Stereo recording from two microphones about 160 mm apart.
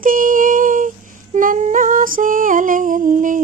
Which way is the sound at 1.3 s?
50° right (ahead or behind).